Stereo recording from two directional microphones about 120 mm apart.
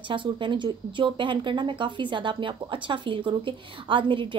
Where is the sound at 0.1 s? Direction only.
45° right (ahead or behind).